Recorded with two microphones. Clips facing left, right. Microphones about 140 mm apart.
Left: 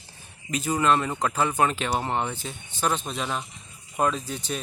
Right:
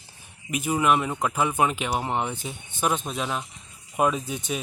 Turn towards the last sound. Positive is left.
turn(degrees=-10)  # may be behind; listen again after turning